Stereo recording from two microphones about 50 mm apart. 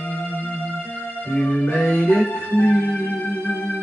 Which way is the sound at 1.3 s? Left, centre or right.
Left.